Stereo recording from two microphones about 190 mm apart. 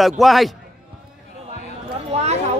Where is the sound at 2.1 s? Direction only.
35° right (ahead or behind).